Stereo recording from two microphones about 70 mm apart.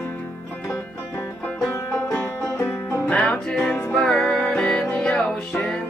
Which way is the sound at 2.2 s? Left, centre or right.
Left.